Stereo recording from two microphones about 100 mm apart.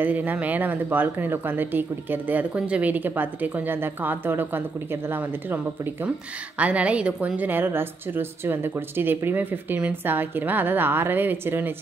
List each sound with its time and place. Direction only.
0.0 s a woman's voice: 20° right (ahead or behind)
6.6 s a woman's voice: 15° right (ahead or behind)